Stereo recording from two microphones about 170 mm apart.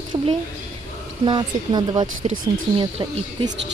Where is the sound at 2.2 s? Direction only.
40° right (ahead or behind).